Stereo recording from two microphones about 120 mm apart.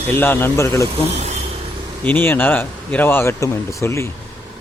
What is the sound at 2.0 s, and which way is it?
Speech, 15° left (ahead or behind).